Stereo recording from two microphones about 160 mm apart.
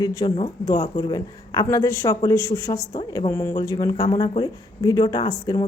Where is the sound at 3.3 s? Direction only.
15° left (ahead or behind).